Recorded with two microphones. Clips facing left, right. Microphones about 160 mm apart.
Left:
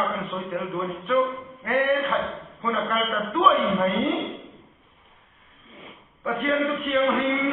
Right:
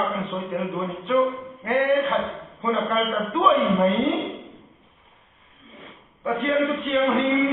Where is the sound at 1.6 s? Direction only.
20° right (ahead or behind).